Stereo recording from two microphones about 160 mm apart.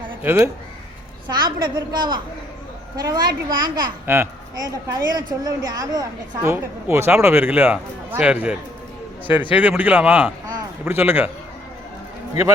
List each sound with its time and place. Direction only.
0.2 s speech: 15° right (ahead or behind)
1.3 s a woman's voice: 25° right (ahead or behind)
4.0 s a woman's voice: 15° right (ahead or behind)